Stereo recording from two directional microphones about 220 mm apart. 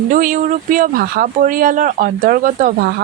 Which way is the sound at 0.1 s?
40° right (ahead or behind).